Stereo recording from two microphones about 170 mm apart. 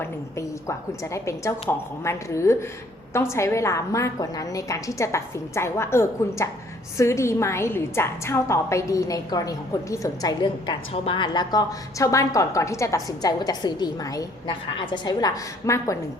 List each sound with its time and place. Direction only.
0.0 s a woman's voice: 15° left (ahead or behind)